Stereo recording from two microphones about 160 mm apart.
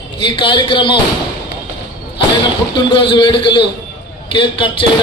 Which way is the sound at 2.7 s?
35° left (ahead or behind).